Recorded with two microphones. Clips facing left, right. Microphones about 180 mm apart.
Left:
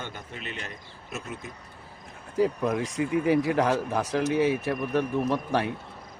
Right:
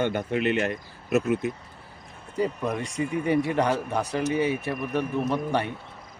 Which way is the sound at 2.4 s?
Centre (ahead or behind).